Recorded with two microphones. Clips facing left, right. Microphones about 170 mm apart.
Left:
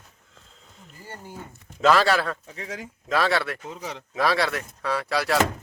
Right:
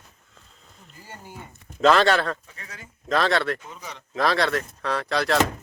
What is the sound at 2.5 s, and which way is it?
Speech, 90° left.